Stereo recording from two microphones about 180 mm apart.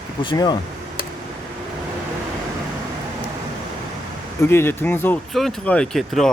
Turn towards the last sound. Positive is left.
turn(degrees=0)  # may be behind; listen again after turning